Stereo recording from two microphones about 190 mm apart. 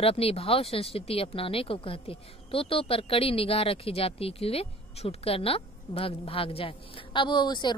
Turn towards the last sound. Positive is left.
turn(degrees=25)  # may be behind; listen again after turning